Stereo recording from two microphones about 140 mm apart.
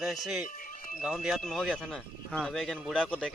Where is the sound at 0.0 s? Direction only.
Centre (ahead or behind).